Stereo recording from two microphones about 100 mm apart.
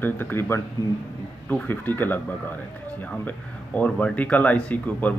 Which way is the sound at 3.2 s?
15° left (ahead or behind).